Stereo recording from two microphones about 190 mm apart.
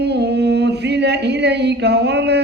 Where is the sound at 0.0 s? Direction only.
60° right (ahead or behind).